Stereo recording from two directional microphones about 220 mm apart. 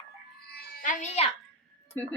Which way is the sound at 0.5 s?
40° left (ahead or behind).